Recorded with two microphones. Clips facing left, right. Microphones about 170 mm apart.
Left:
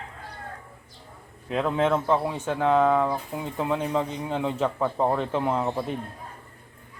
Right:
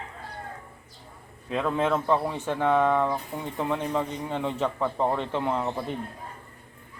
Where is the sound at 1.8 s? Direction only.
5° left (ahead or behind).